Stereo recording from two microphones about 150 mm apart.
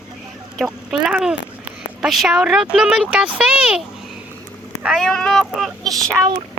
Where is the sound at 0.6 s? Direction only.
5° right (ahead or behind).